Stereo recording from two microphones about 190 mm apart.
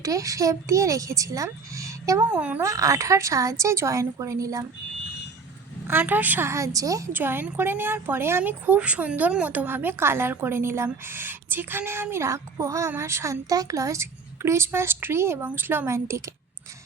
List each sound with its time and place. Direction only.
0.0 s a woman's voice: 15° right (ahead or behind)
5.9 s a woman's voice: 10° right (ahead or behind)